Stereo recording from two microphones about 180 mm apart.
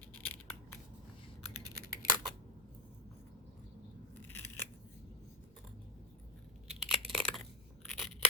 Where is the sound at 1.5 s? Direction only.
60° left (ahead or behind).